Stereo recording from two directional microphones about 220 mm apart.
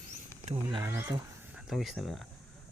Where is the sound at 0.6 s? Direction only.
15° right (ahead or behind).